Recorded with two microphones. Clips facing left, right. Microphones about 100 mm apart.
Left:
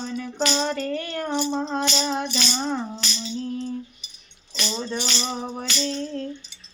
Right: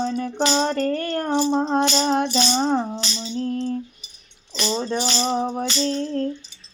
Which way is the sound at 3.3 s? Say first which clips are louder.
Right 5 dB; 45° right (ahead or behind).